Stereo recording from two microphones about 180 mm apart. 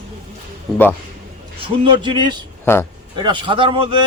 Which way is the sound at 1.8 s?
25° right (ahead or behind).